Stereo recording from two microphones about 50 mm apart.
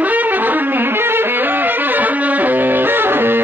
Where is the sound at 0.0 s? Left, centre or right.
Right.